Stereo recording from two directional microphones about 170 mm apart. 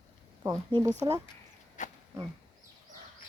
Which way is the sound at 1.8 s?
45° left (ahead or behind).